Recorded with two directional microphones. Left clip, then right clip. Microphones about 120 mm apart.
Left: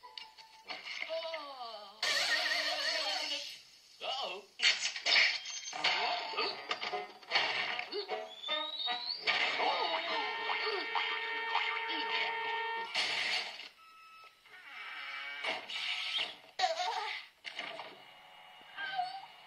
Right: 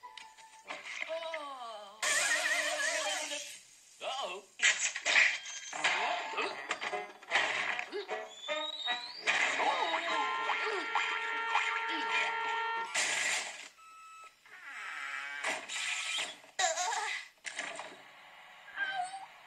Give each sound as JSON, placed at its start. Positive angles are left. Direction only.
{"t": 0.7, "sound": "music", "side_deg": -40}
{"t": 14.7, "sound": "vehicle", "side_deg": -45}
{"t": 15.7, "sound": "baby laughter", "side_deg": -45}
{"t": 18.8, "sound": "dog", "side_deg": -40}